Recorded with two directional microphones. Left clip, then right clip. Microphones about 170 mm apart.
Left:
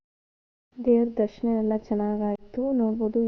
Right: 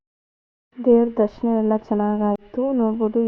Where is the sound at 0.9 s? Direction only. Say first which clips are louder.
Right 6 dB; centre (ahead or behind).